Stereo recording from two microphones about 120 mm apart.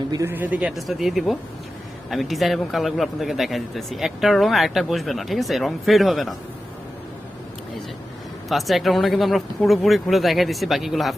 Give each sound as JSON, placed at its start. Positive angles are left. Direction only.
{"t": 0.3, "sound": "speech", "side_deg": -15}
{"t": 0.8, "sound": "a man's voice", "side_deg": 0}
{"t": 8.4, "sound": "a man's voice", "side_deg": 0}